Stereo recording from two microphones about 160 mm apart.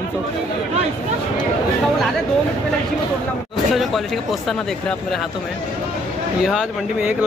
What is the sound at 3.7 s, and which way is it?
Speech, centre (ahead or behind).